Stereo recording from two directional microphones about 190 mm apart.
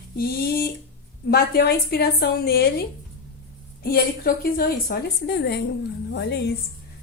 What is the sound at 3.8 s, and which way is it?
A woman's voice, 50° left (ahead or behind).